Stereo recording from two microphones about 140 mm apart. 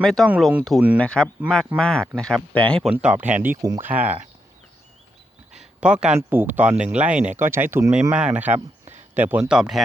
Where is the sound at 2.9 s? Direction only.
10° right (ahead or behind).